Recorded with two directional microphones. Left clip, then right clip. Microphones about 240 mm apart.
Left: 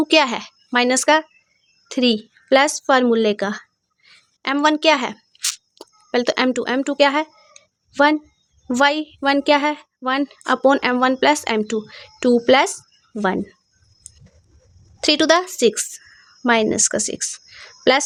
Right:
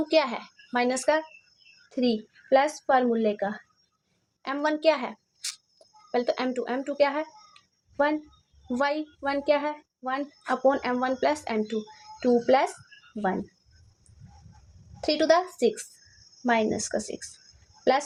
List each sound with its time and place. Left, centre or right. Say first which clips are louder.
0.1 s a woman's voice: left 6 dB; left
15.0 s a woman's voice: left 7 dB; left